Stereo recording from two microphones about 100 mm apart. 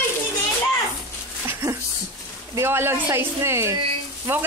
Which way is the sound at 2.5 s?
25° right (ahead or behind).